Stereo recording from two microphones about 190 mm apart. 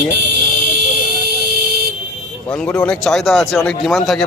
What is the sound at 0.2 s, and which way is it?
Vehicle, 65° right (ahead or behind).